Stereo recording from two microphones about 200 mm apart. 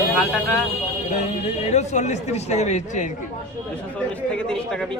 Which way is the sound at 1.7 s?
35° left (ahead or behind).